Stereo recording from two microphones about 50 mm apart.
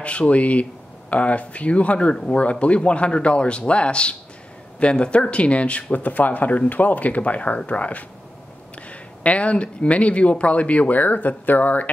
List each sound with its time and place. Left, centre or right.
0.0 s speech: left
9.2 s speech: left